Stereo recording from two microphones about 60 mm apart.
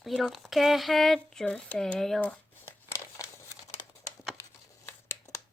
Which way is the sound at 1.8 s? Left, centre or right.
Centre.